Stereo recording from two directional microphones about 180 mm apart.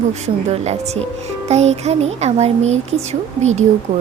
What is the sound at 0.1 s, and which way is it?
Speech, 35° right (ahead or behind).